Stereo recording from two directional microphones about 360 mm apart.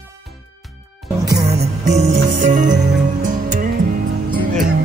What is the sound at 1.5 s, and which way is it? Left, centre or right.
Music, right.